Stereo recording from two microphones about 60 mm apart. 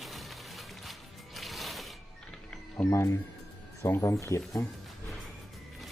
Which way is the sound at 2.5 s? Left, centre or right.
Left.